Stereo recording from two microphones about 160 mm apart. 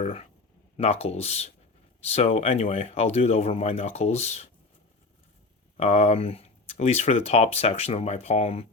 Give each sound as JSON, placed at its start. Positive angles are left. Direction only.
{"t": 0.0, "sound": "speech", "side_deg": 40}
{"t": 5.7, "sound": "speech", "side_deg": 40}